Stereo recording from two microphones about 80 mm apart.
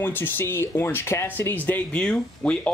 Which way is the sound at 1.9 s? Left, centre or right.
Centre.